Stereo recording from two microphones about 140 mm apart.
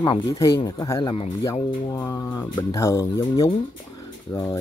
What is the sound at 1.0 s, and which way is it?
Speech, 40° left (ahead or behind).